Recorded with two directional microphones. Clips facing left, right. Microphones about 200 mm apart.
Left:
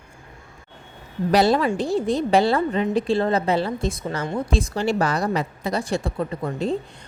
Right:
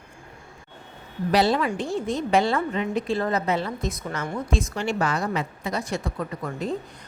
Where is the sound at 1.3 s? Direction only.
40° left (ahead or behind).